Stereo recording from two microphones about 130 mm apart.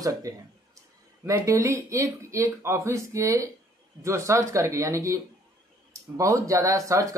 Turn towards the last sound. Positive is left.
turn(degrees=-25)  # may be behind; listen again after turning